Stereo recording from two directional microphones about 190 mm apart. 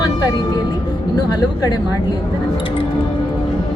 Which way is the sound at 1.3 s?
20° left (ahead or behind).